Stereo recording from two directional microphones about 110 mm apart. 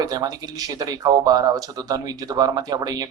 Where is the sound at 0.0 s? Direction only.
35° right (ahead or behind).